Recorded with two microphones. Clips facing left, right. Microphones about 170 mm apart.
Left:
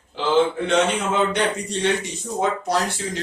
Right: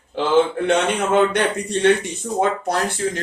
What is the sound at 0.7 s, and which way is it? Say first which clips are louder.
Speech: right 2 dB; 60° right (ahead or behind).